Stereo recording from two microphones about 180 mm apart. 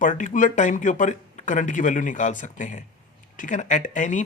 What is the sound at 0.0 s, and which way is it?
Speech, 45° left (ahead or behind).